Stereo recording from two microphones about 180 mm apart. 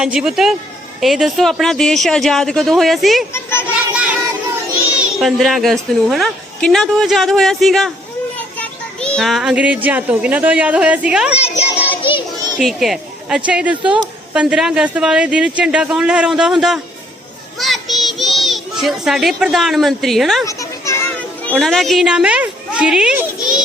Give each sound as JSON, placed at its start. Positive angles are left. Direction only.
{"t": 0.0, "sound": "speech", "side_deg": -5}
{"t": 3.3, "sound": "children playing", "side_deg": 15}
{"t": 5.2, "sound": "a child's voice", "side_deg": 0}
{"t": 11.3, "sound": "child singing", "side_deg": 35}
{"t": 12.5, "sound": "speech", "side_deg": 0}
{"t": 17.6, "sound": "child singing", "side_deg": 0}
{"t": 20.5, "sound": "children playing", "side_deg": 15}
{"t": 21.6, "sound": "a woman's voice", "side_deg": 0}